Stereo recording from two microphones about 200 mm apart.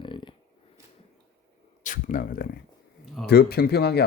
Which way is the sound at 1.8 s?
40° left (ahead or behind).